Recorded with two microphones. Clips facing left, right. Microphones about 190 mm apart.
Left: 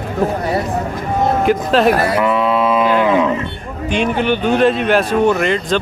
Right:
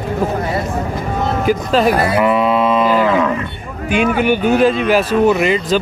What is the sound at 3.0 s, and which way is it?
Cattle, 15° left (ahead or behind).